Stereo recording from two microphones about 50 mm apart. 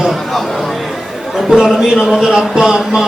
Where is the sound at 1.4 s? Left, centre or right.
Centre.